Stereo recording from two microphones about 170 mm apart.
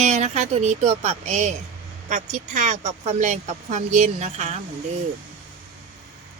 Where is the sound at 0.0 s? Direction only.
40° right (ahead or behind).